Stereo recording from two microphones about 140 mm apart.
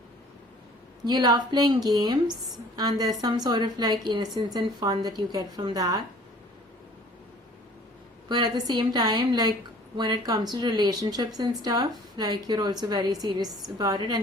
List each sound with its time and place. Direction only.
1.0 s a woman's voice: 30° right (ahead or behind)
8.3 s a woman's voice: 30° right (ahead or behind)